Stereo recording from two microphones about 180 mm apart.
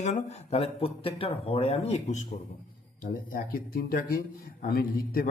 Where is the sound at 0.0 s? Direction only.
40° left (ahead or behind).